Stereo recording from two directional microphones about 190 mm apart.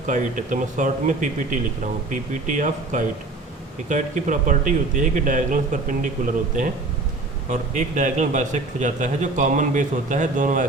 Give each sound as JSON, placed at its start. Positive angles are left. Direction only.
{"t": 0.0, "sound": "a man's voice", "side_deg": -40}